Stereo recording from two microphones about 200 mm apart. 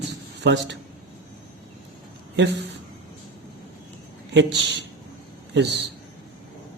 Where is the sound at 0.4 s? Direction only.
60° right (ahead or behind).